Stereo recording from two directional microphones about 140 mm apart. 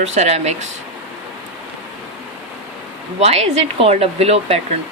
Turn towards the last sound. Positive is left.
turn(degrees=-45)  # may be behind; listen again after turning